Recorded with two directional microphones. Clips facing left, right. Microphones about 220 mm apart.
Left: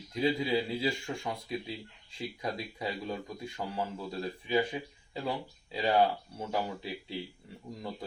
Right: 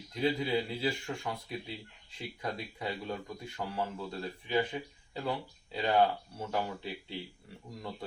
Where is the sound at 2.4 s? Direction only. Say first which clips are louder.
Left 1 dB; 15° left (ahead or behind).